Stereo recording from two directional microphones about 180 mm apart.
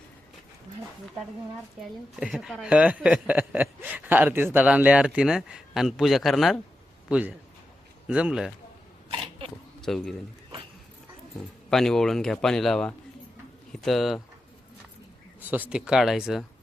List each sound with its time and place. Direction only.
2.1 s a man's voice: 5° right (ahead or behind)
9.1 s a sound: 30° right (ahead or behind)
9.8 s speech: centre (ahead or behind)
11.3 s speech: centre (ahead or behind)
15.4 s speech: 10° right (ahead or behind)